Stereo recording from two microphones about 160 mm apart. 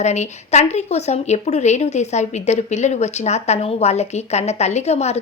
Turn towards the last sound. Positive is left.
turn(degrees=45)  # may be behind; listen again after turning